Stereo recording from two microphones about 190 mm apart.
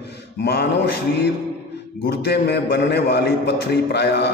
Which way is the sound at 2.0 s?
60° left (ahead or behind).